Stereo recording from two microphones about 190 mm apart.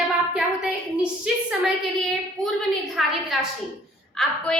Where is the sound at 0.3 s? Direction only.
5° right (ahead or behind).